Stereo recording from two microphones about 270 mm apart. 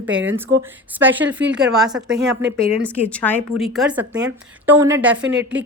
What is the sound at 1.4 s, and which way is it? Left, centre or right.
A woman's voice, centre.